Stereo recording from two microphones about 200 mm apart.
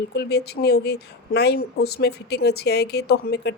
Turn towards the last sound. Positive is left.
turn(degrees=55)  # may be behind; listen again after turning